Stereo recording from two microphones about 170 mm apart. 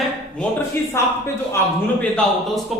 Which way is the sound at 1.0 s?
15° left (ahead or behind).